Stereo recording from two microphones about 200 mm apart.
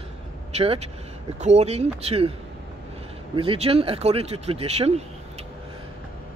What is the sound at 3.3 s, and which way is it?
Speech, 25° right (ahead or behind).